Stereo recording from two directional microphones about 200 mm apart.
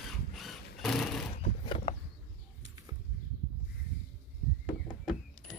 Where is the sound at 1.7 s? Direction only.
30° left (ahead or behind).